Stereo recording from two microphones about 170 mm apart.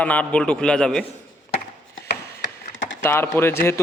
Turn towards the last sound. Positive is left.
turn(degrees=15)  # may be behind; listen again after turning